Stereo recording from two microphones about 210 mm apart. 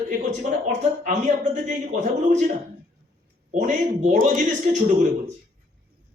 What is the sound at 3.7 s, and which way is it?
Speech, 35° right (ahead or behind).